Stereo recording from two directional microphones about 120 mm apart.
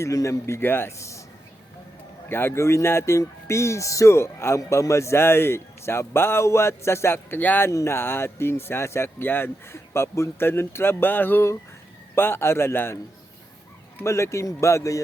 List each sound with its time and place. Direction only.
0.0 s speech: 25° left (ahead or behind)
2.3 s speech: 20° left (ahead or behind)
14.0 s speech: 25° left (ahead or behind)